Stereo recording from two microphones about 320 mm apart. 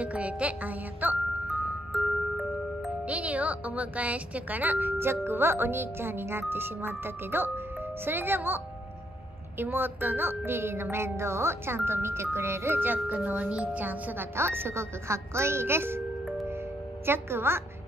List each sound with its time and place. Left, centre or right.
0.0 s music: centre
3.1 s a woman's voice: centre
9.6 s a woman's voice: centre